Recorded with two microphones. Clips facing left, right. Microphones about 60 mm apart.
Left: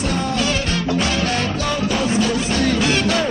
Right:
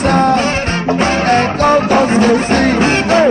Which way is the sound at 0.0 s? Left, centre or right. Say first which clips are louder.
Right 9 dB; right.